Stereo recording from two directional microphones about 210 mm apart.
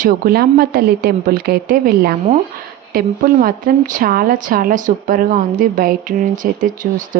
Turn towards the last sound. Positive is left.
turn(degrees=-40)  # may be behind; listen again after turning